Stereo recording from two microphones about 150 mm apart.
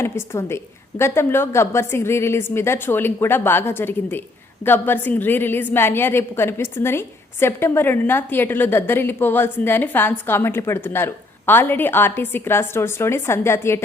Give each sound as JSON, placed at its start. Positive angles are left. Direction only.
{"t": 0.0, "sound": "a woman's voice", "side_deg": 15}